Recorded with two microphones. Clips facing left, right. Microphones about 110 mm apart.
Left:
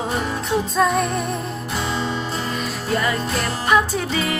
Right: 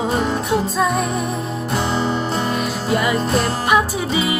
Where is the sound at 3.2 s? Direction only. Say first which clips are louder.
Right 5 dB; 25° right (ahead or behind).